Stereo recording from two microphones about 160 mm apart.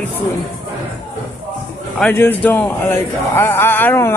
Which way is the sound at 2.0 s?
10° left (ahead or behind).